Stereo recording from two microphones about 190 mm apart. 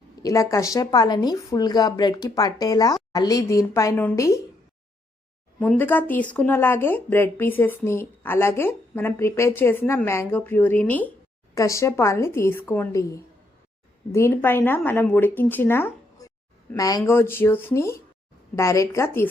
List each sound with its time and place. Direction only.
0.2 s speech: 15° left (ahead or behind)
5.5 s speech: 10° left (ahead or behind)